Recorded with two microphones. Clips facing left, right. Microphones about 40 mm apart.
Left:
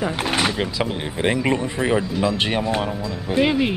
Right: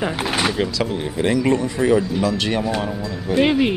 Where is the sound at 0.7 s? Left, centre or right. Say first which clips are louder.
Right 2 dB; left.